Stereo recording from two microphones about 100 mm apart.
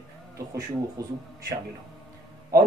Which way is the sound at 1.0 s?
35° right (ahead or behind).